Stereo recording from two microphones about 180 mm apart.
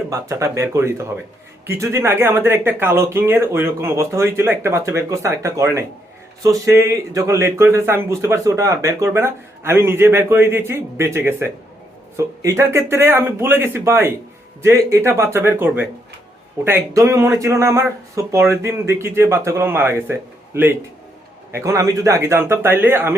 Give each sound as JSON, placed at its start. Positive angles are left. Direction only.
{"t": 0.1, "sound": "speech", "side_deg": -15}